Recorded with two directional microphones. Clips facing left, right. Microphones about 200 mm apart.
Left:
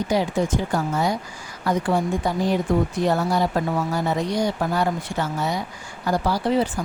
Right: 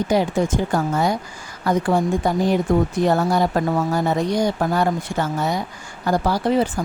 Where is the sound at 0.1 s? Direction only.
50° right (ahead or behind).